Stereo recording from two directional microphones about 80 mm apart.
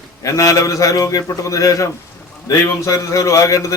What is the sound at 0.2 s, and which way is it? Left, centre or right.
A man's voice, left.